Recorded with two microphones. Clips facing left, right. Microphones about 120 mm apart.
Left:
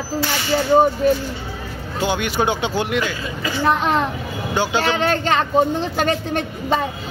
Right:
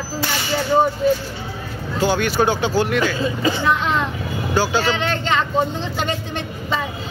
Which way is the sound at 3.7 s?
45° left (ahead or behind).